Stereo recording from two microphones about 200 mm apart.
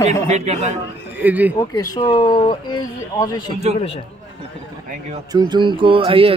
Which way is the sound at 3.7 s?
35° left (ahead or behind).